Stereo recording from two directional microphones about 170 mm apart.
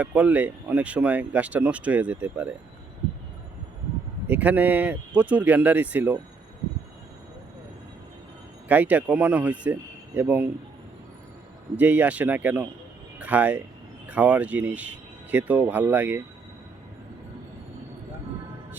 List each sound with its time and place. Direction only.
0.0 s speech: 10° right (ahead or behind)
4.3 s speech: 10° right (ahead or behind)
8.7 s speech: 10° right (ahead or behind)
11.8 s speech: 10° right (ahead or behind)